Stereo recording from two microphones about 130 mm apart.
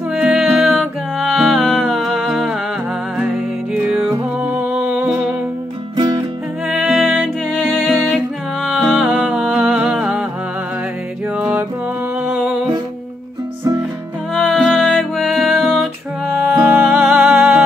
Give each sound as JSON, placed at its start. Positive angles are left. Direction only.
{"t": 0.1, "sound": "music", "side_deg": -5}
{"t": 3.7, "sound": "music", "side_deg": -5}
{"t": 5.9, "sound": "music", "side_deg": -30}
{"t": 6.7, "sound": "music", "side_deg": -5}
{"t": 7.5, "sound": "music", "side_deg": 5}
{"t": 11.3, "sound": "music", "side_deg": -10}
{"t": 14.3, "sound": "music", "side_deg": 5}
{"t": 16.3, "sound": "music", "side_deg": -10}